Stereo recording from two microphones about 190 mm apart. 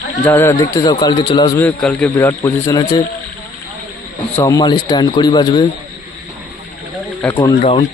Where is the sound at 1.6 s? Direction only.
5° left (ahead or behind).